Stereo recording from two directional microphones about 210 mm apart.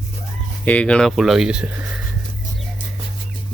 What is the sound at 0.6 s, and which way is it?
Speech, 5° left (ahead or behind).